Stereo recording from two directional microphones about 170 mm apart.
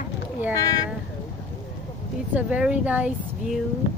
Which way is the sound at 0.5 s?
20° left (ahead or behind).